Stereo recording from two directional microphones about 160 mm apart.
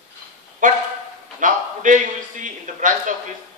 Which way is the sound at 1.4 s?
55° right (ahead or behind).